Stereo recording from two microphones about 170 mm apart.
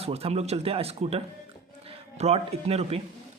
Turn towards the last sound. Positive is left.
turn(degrees=-35)  # may be behind; listen again after turning